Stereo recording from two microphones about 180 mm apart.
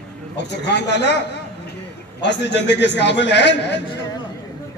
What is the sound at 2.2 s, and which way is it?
A man's voice, 75° left (ahead or behind).